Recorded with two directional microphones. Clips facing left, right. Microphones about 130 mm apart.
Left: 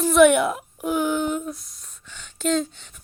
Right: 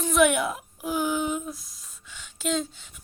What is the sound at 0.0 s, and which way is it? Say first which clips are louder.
Speech: left 6 dB; centre (ahead or behind).